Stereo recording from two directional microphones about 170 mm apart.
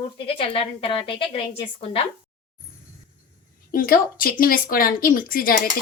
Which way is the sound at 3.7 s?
60° left (ahead or behind).